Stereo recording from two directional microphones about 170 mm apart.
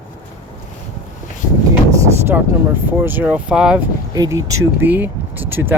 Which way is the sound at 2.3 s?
10° right (ahead or behind).